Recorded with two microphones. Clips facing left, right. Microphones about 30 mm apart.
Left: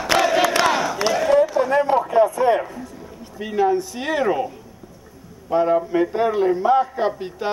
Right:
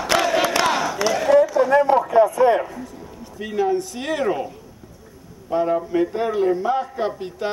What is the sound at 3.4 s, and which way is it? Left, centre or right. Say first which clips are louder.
Speech: left 2 dB; centre.